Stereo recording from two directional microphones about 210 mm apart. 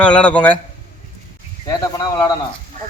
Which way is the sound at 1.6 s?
15° left (ahead or behind).